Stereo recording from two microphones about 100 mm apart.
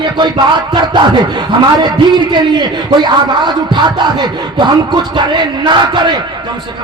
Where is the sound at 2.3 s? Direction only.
50° right (ahead or behind).